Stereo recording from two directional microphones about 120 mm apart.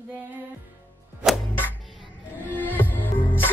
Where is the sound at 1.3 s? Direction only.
Centre (ahead or behind).